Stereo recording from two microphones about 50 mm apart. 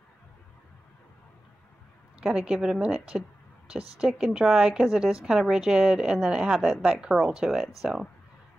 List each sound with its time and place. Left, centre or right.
2.2 s a woman's voice: centre
3.6 s a woman's voice: right; by 8.1 s centre